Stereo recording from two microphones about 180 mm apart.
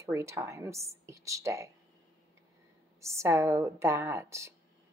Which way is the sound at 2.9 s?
15° right (ahead or behind).